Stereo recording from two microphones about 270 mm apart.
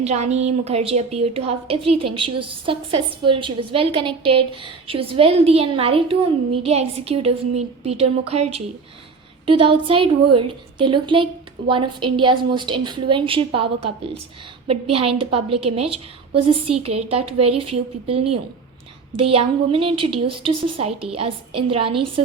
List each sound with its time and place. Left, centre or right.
0.0 s a woman's voice: right
14.9 s a woman's voice: right